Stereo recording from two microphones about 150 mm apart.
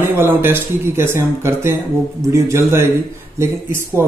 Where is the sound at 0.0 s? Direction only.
15° right (ahead or behind).